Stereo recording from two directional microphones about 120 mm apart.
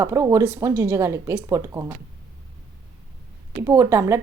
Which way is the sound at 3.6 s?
25° right (ahead or behind).